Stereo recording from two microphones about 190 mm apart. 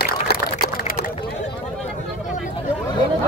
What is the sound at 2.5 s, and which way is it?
Chatter, 25° left (ahead or behind).